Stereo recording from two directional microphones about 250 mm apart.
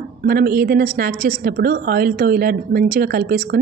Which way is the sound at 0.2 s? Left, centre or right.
Right.